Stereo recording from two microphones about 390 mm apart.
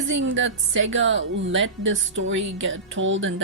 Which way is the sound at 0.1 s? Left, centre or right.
Right.